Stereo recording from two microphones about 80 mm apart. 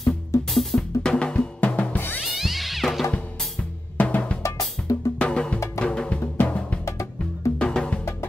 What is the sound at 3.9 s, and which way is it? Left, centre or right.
Music, left.